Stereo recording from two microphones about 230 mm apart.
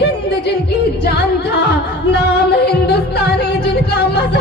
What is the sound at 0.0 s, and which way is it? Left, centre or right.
Music, left.